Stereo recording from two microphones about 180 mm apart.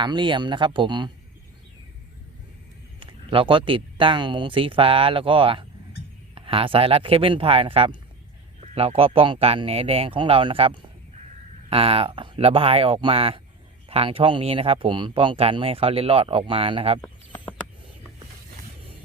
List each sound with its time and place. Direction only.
0.0 s speech: 25° right (ahead or behind)
3.0 s speech: 30° right (ahead or behind)
17.0 s a sound: 10° left (ahead or behind)